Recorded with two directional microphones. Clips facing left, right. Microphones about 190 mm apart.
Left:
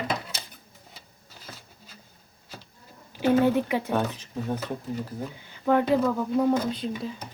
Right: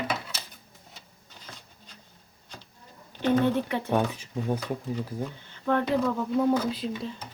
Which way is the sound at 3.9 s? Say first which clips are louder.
Right 1 dB; 10° right (ahead or behind).